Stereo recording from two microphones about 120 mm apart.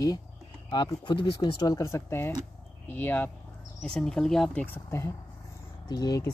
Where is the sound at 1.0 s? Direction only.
40° left (ahead or behind); by 3.3 s 15° left (ahead or behind).